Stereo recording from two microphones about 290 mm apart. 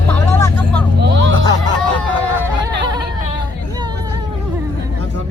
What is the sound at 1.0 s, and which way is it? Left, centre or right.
Speech, right.